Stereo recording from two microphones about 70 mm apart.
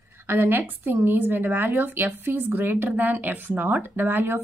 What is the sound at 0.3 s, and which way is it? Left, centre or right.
Speech, right.